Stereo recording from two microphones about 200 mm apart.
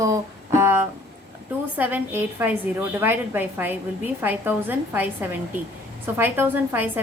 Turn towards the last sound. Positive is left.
turn(degrees=-10)  # may be behind; listen again after turning